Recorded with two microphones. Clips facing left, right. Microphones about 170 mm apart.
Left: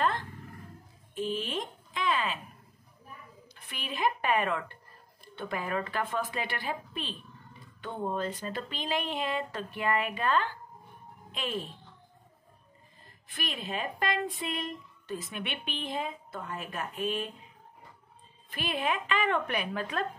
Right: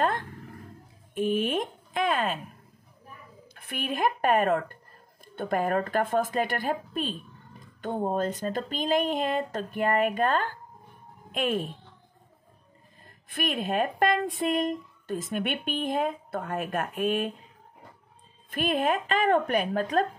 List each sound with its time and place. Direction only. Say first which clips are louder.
1.1 s speech: right 7 dB; 55° right (ahead or behind)
3.5 s speech: right 7 dB; 55° right (ahead or behind)
13.3 s speech: right 8 dB; 55° right (ahead or behind)
18.5 s speech: right 6 dB; 50° right (ahead or behind)